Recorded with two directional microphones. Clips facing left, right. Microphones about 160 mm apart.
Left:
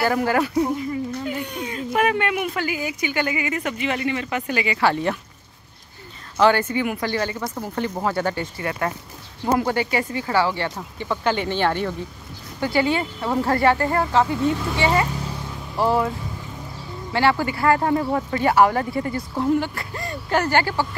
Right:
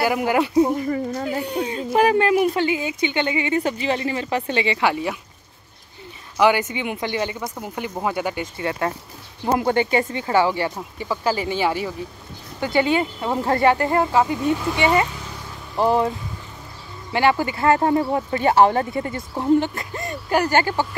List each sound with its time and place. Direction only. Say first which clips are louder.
0.0 s speech: right 1 dB; 15° right (ahead or behind)
1.2 s speech: right 4 dB; 35° right (ahead or behind)
4.8 s speech: left 1 dB; 10° right (ahead or behind)
6.4 s speech: left 1 dB; 15° right (ahead or behind)
8.5 s speech: right 1 dB; 25° right (ahead or behind); by 11.9 s 5° right (ahead or behind)
12.5 s speech: right 1 dB; 20° right (ahead or behind)
17.1 s speech: right 1 dB; 15° right (ahead or behind)